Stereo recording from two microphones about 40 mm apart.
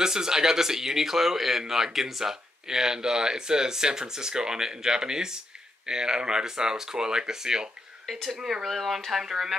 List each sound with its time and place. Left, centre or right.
0.0 s speech: centre
8.1 s speech: centre